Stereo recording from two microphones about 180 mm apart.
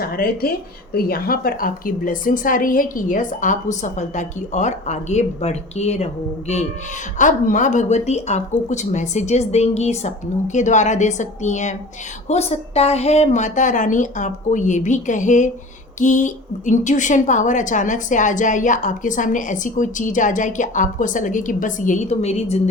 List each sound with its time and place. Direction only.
0.0 s a woman's voice: 55° left (ahead or behind); by 6.1 s 35° left (ahead or behind)
7.2 s a woman's voice: 45° left (ahead or behind)